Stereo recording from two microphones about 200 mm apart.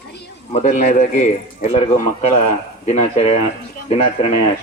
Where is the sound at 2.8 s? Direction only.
35° left (ahead or behind).